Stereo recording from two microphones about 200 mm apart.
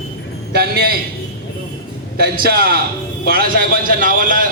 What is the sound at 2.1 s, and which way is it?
A man's voice, 50° right (ahead or behind).